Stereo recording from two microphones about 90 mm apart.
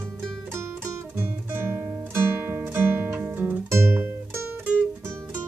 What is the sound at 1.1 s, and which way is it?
Guitar, 25° right (ahead or behind).